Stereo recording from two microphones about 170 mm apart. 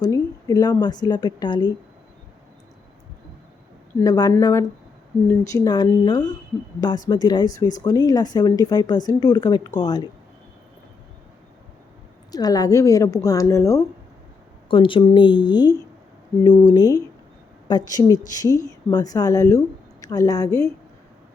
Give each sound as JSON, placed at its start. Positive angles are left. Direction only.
{"t": 0.0, "sound": "speech", "side_deg": 20}
{"t": 4.0, "sound": "speech", "side_deg": 20}
{"t": 12.3, "sound": "speech", "side_deg": 20}
{"t": 14.7, "sound": "speech", "side_deg": 30}